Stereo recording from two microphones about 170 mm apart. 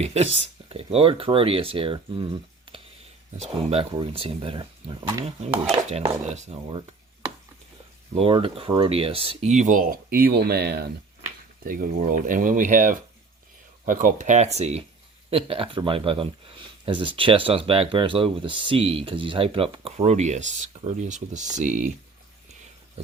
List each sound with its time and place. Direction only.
0.0 s speech: 40° right (ahead or behind)
6.2 s speech: 35° right (ahead or behind)
8.1 s speech: 35° right (ahead or behind); by 10.8 s 70° right (ahead or behind)
11.6 s speech: 55° right (ahead or behind)